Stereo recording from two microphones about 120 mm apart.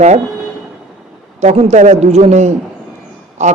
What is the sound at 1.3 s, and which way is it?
A man's voice, 65° right (ahead or behind).